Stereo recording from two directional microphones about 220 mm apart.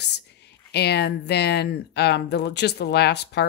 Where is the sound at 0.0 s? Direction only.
50° left (ahead or behind).